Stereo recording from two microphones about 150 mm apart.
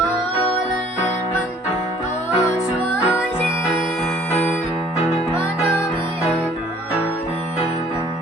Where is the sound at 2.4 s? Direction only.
20° left (ahead or behind).